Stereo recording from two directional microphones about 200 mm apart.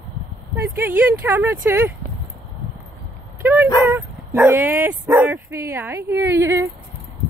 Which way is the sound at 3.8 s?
10° right (ahead or behind).